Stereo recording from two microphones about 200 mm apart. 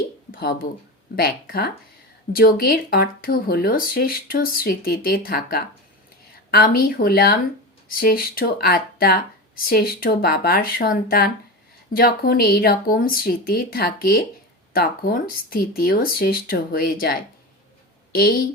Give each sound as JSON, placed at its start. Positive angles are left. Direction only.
{"t": 0.3, "sound": "speech", "side_deg": 45}